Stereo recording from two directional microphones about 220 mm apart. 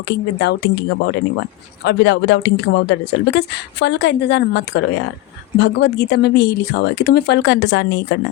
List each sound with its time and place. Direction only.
0.1 s speech: 55° left (ahead or behind)